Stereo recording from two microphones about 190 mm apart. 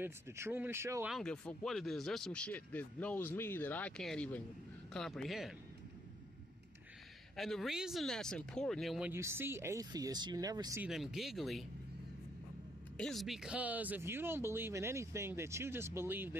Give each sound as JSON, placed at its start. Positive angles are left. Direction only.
{"t": 0.0, "sound": "speech", "side_deg": -10}
{"t": 1.1, "sound": "speech", "side_deg": 5}
{"t": 7.3, "sound": "speech", "side_deg": 0}
{"t": 9.1, "sound": "speech", "side_deg": -15}
{"t": 10.8, "sound": "speech", "side_deg": 0}
{"t": 12.9, "sound": "speech", "side_deg": 0}